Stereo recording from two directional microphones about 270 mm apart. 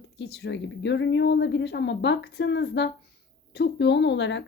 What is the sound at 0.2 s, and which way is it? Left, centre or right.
Speech, left.